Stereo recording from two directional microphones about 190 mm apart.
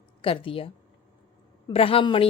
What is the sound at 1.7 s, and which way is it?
Speech, 30° left (ahead or behind).